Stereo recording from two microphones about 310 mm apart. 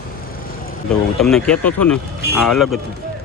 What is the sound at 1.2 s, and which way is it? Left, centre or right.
Speech, centre.